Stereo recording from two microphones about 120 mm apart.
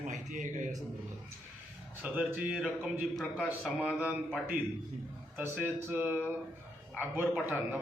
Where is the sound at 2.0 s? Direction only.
15° right (ahead or behind).